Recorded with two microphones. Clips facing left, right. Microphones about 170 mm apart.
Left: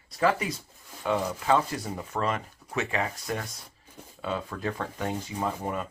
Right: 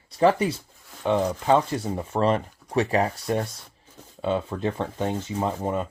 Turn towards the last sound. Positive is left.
turn(degrees=-25)  # may be behind; listen again after turning